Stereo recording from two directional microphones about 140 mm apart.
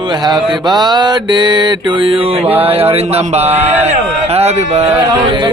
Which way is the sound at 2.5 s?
15° right (ahead or behind).